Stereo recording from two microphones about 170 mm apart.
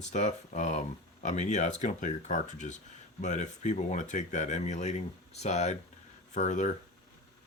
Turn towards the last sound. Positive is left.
turn(degrees=45)  # may be behind; listen again after turning